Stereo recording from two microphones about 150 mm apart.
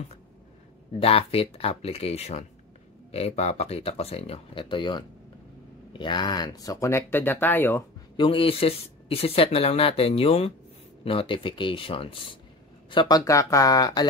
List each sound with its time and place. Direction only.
1.0 s speech: 40° left (ahead or behind); by 7.8 s 15° left (ahead or behind)
8.2 s speech: 35° left (ahead or behind)